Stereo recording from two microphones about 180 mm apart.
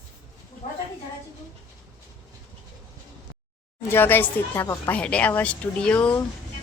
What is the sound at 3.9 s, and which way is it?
Speech, 10° left (ahead or behind).